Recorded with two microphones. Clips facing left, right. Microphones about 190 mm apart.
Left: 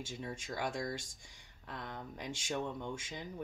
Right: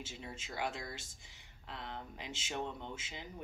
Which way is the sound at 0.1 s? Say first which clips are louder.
Left 4 dB; 50° left (ahead or behind).